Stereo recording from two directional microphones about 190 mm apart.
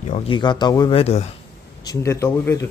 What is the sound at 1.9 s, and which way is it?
Speech, 15° left (ahead or behind).